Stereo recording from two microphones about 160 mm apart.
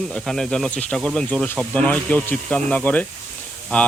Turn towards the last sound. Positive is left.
turn(degrees=10)  # may be behind; listen again after turning